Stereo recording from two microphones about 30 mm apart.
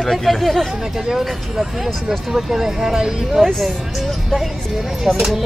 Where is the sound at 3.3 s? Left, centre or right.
Centre.